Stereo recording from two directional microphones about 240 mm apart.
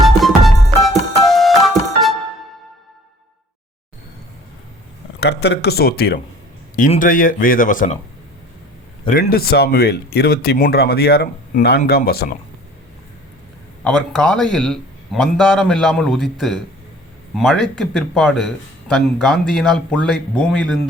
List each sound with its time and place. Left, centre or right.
0.0 s music: centre
5.2 s speech: left
9.0 s speech: left
13.8 s a man's voice: centre